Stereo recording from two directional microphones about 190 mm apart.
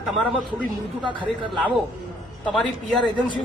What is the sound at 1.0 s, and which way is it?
Speech, 25° right (ahead or behind).